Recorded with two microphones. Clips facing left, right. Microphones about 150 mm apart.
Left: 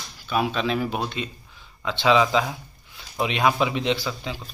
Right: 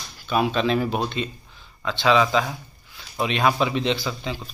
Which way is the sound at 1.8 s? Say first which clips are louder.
Even; 15° left (ahead or behind).